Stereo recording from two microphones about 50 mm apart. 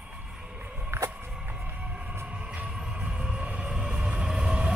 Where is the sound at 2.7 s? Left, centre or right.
Centre.